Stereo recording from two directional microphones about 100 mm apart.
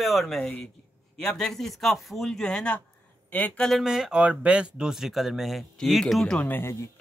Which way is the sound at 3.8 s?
5° right (ahead or behind).